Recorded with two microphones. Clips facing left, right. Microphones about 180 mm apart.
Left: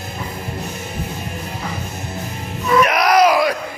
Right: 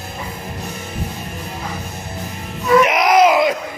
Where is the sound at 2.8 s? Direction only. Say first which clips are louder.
Left 1 dB; 20° right (ahead or behind).